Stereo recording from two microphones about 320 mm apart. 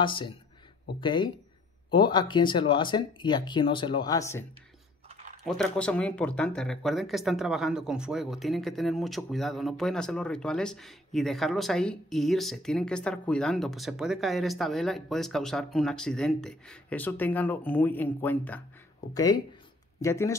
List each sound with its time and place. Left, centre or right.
0.0 s speech: centre
5.0 s a sound: centre
5.4 s speech: centre